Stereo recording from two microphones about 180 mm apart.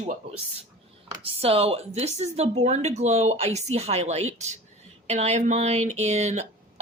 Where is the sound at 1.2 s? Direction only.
35° right (ahead or behind).